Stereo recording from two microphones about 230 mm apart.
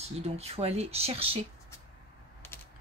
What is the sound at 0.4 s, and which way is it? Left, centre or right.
Speech, right.